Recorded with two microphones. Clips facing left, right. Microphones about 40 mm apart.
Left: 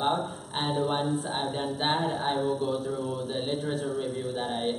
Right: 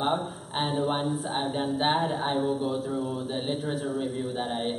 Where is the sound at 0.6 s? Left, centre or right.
Centre.